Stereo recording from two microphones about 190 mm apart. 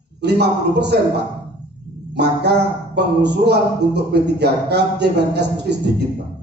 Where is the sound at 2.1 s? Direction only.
60° right (ahead or behind).